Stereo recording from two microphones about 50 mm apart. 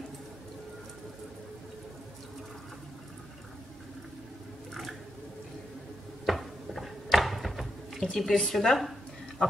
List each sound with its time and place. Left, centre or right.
6.2 s a sound: centre
8.2 s a woman's voice: centre
9.4 s speech: left